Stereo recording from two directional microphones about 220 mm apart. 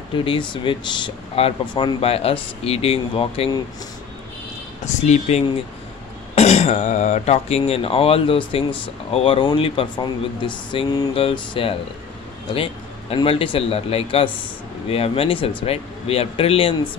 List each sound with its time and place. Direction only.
0.1 s speech: 25° left (ahead or behind)
4.8 s speech: 30° left (ahead or behind)